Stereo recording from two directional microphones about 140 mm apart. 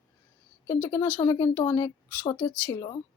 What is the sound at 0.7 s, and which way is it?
Speech, 20° left (ahead or behind).